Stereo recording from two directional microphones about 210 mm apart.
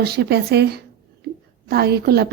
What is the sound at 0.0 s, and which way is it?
A woman's voice, 50° right (ahead or behind).